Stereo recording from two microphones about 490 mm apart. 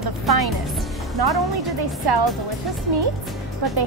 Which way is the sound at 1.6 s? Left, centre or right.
Right.